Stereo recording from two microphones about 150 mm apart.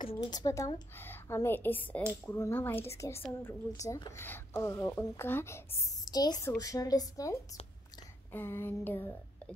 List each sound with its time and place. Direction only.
0.2 s a woman's voice: 25° left (ahead or behind)